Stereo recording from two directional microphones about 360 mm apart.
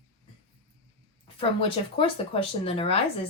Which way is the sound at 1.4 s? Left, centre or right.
Centre.